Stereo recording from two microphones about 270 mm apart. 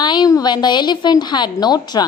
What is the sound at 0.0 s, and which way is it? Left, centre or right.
A woman's voice, centre.